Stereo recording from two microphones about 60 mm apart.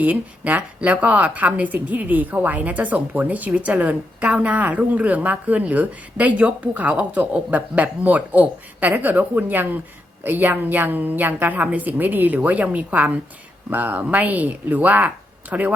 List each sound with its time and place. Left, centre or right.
0.0 s a woman's voice: right